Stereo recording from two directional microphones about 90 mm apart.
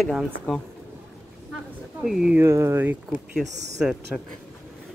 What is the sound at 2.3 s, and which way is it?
Speech, 30° right (ahead or behind).